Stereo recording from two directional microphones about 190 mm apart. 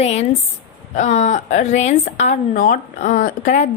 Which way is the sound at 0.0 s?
35° left (ahead or behind).